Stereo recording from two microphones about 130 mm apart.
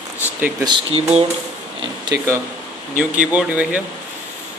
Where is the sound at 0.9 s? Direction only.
55° right (ahead or behind).